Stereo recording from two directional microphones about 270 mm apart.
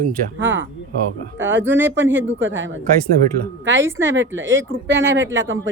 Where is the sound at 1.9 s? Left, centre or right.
Right.